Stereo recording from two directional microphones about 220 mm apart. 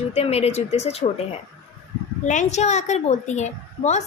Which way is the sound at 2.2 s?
35° left (ahead or behind).